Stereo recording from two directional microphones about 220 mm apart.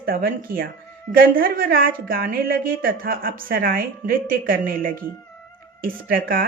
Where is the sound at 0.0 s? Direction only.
40° right (ahead or behind).